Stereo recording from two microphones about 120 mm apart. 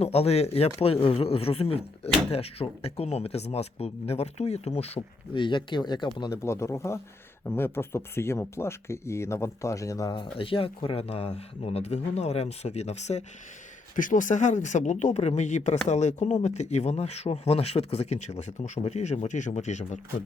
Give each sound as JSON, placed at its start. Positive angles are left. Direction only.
{"t": 0.0, "sound": "speech", "side_deg": 60}
{"t": 4.9, "sound": "speech", "side_deg": 45}
{"t": 6.3, "sound": "speech", "side_deg": 20}
{"t": 10.2, "sound": "speech", "side_deg": 50}
{"t": 13.9, "sound": "speech", "side_deg": 90}